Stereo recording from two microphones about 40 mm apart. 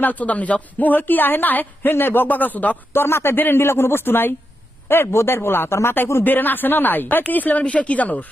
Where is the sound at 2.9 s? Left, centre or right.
Left.